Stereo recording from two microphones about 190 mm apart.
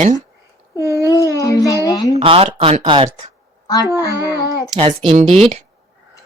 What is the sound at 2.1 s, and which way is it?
Speech, 30° right (ahead or behind).